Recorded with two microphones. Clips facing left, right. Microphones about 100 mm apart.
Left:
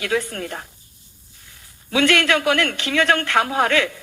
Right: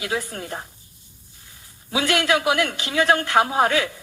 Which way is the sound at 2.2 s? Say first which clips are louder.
Left 1 dB; 15° right (ahead or behind).